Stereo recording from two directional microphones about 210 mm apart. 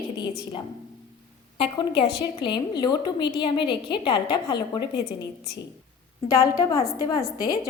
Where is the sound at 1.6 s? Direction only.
25° left (ahead or behind).